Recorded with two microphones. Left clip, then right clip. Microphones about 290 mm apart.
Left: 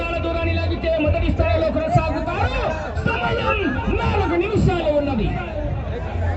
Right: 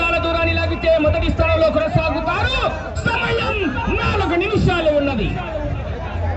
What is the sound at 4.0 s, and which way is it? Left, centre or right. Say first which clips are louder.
Chatter: right 2 dB; right.